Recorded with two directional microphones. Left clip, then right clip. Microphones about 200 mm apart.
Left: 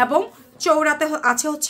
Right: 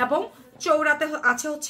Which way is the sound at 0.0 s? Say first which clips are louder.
Left 5 dB; 55° left (ahead or behind).